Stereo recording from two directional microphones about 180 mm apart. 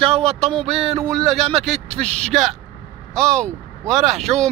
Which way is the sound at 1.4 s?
35° right (ahead or behind).